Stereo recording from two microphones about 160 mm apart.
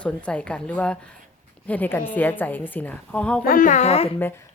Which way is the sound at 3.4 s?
60° left (ahead or behind).